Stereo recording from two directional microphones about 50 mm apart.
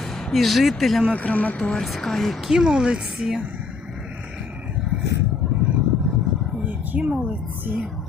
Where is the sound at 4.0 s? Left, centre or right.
Centre.